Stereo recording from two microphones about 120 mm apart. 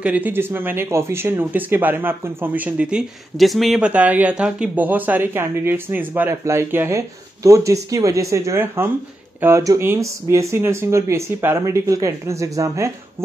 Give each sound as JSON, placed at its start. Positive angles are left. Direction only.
{"t": 0.0, "sound": "speech", "side_deg": -15}
{"t": 3.9, "sound": "speech", "side_deg": -10}